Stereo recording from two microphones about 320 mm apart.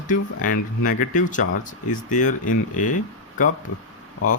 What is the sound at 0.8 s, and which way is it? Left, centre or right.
Speech, left.